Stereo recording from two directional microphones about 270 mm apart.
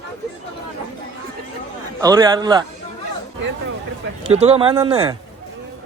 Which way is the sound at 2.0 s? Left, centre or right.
Centre.